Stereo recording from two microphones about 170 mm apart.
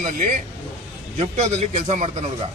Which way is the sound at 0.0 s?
50° right (ahead or behind).